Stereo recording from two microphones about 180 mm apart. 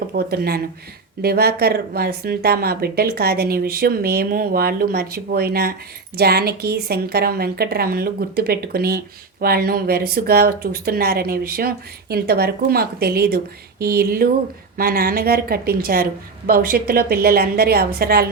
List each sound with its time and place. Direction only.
0.3 s speech: 60° right (ahead or behind)